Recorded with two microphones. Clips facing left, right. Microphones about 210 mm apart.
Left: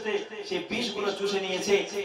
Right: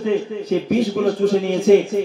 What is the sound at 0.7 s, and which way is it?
A man's voice, 55° right (ahead or behind).